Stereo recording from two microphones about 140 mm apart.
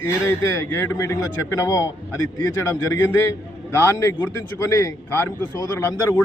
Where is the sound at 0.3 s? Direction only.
15° left (ahead or behind).